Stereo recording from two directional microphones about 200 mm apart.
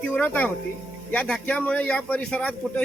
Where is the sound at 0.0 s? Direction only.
5° left (ahead or behind).